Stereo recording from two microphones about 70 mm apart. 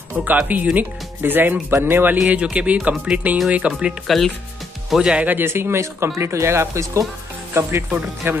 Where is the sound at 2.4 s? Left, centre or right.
Centre.